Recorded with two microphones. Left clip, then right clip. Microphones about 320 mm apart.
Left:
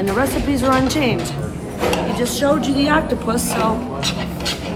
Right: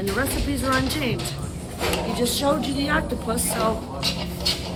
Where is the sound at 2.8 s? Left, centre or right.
Centre.